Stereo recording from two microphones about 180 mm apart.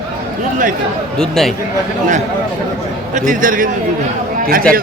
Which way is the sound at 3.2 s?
50° right (ahead or behind).